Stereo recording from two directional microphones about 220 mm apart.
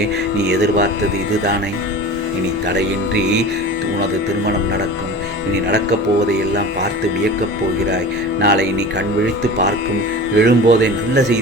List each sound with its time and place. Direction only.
0.3 s speech: 50° right (ahead or behind)
2.6 s speech: 50° right (ahead or behind)
8.4 s speech: 50° right (ahead or behind)
10.3 s speech: 50° right (ahead or behind)